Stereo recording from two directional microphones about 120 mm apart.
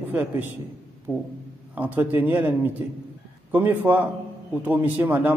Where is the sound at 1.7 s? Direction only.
15° right (ahead or behind).